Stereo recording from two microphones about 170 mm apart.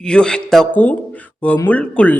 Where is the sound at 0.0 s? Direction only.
5° left (ahead or behind).